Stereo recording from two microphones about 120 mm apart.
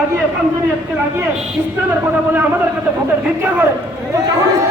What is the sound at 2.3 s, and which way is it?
Speech, 15° right (ahead or behind).